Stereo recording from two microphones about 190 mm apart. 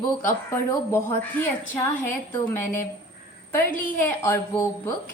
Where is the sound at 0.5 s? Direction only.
15° left (ahead or behind).